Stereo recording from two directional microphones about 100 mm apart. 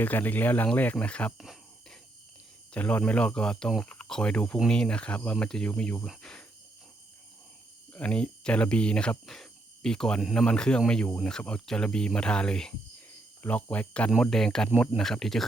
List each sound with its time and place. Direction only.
0.0 s speech: 20° left (ahead or behind)
1.4 s a sound: centre (ahead or behind)
2.7 s speech: 15° left (ahead or behind)
7.9 s speech: 10° left (ahead or behind)
10.4 s speech: 10° left (ahead or behind)